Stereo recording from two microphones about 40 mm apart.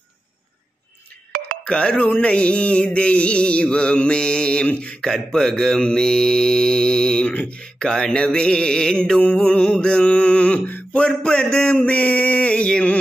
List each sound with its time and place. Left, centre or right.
1.6 s speech: left
2.1 s mantra: left
4.6 s speech: left
5.0 s mantra: centre
11.7 s male singing: left
12.6 s mantra: left